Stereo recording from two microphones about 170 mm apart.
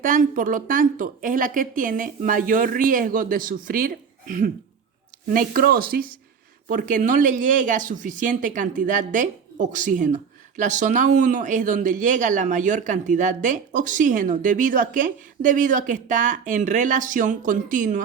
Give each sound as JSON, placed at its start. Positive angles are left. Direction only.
{"t": 0.0, "sound": "speech", "side_deg": -55}